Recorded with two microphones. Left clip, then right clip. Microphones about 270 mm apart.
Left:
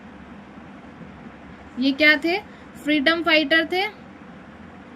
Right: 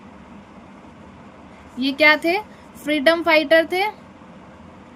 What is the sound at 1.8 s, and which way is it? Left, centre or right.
A woman's voice, right.